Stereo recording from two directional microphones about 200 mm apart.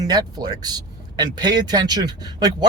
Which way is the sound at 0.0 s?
20° right (ahead or behind).